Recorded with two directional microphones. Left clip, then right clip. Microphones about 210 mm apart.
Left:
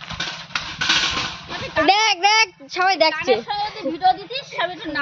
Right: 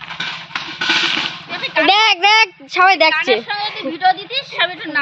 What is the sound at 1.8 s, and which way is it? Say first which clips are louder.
A woman's voice: right 4 dB; 15° right (ahead or behind).